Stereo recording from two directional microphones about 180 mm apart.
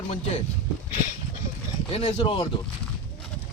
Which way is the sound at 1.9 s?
35° left (ahead or behind).